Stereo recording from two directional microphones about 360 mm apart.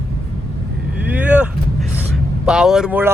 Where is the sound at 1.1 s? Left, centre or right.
Centre.